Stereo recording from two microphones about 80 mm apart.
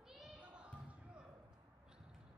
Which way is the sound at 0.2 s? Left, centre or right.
Centre.